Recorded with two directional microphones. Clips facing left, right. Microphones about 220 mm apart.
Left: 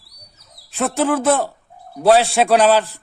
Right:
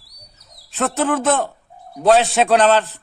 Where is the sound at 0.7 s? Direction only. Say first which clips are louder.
Left 1 dB; 10° left (ahead or behind).